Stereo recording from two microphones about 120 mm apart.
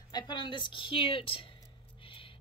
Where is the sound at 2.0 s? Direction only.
45° left (ahead or behind).